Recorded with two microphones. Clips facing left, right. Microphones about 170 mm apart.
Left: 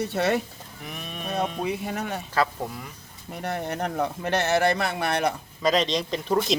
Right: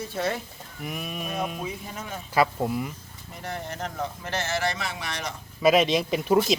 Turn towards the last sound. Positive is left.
turn(degrees=-10)  # may be behind; listen again after turning